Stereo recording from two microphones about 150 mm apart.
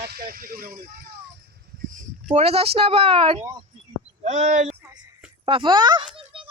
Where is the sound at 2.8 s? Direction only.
40° right (ahead or behind).